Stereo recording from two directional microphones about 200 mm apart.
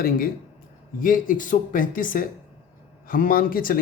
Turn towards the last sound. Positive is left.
turn(degrees=45)  # may be behind; listen again after turning